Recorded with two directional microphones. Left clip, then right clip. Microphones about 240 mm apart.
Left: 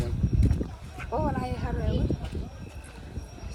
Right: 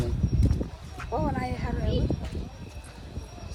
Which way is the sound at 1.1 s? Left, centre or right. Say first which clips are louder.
Even; right.